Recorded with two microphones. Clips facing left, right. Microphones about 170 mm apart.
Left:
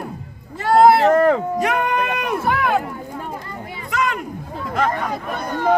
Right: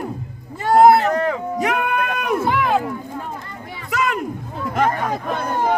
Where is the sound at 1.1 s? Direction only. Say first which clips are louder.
Left 6 dB; 50° left (ahead or behind).